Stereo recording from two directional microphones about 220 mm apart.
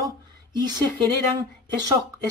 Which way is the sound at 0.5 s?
20° right (ahead or behind).